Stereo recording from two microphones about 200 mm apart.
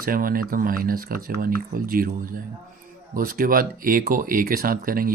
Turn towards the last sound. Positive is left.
turn(degrees=-45)  # may be behind; listen again after turning